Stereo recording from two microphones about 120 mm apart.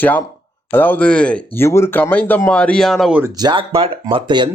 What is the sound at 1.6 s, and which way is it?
Speech, 20° left (ahead or behind).